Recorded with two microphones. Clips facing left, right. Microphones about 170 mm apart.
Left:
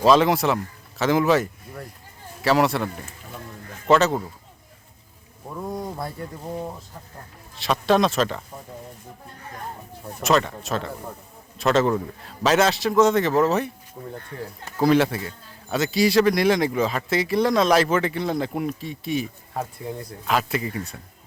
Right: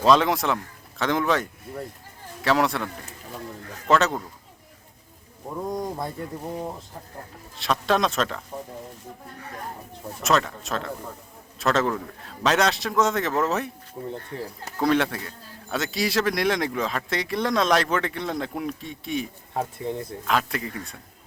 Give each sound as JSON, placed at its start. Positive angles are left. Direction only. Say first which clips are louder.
{"t": 0.0, "sound": "speech", "louder": "left 2 dB", "side_deg": 5}
{"t": 5.5, "sound": "speech", "louder": "right 2 dB", "side_deg": -20}
{"t": 7.5, "sound": "speech", "louder": "left 3 dB", "side_deg": 0}
{"t": 10.2, "sound": "speech", "louder": "left 2 dB", "side_deg": 0}
{"t": 14.0, "sound": "speech", "louder": "right 4 dB", "side_deg": -15}
{"t": 14.8, "sound": "speech", "louder": "left 4 dB", "side_deg": 5}